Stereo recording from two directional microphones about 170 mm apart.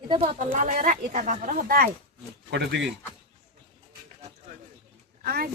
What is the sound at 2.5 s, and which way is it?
Speech, 90° right.